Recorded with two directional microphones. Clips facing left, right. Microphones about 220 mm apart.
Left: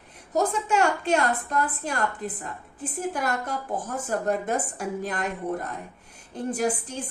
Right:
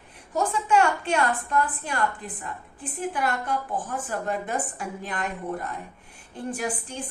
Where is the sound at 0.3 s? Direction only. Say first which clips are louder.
Right 1 dB; 40° left (ahead or behind).